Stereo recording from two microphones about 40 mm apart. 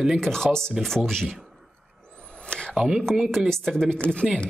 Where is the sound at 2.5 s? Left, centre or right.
Left.